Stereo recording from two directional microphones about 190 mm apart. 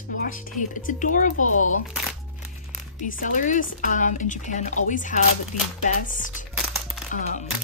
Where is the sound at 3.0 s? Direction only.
40° left (ahead or behind).